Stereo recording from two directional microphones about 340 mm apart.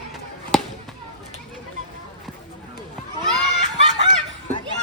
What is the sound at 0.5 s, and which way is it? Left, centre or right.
Basketball bounce, centre.